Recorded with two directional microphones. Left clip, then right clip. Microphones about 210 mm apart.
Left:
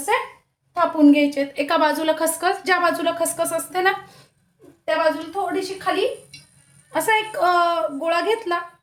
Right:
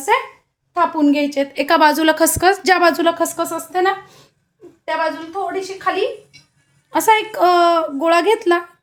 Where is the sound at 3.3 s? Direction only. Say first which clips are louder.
Right 2 dB; 25° right (ahead or behind).